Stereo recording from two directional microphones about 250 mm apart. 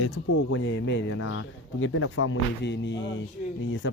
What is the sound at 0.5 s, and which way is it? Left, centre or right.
Speech, left.